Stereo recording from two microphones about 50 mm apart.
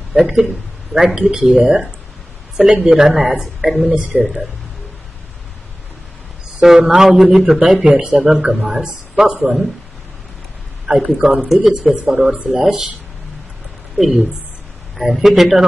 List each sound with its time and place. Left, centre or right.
0.1 s a man's voice: centre
3.9 s a woman's voice: right
6.6 s speech: centre
7.8 s a woman's voice: right
8.5 s a man's voice: centre
8.8 s a woman's voice: centre
10.9 s speech: centre
12.4 s a woman's voice: right
13.9 s a man's voice: centre